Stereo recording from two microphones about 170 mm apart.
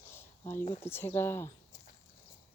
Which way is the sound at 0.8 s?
15° left (ahead or behind).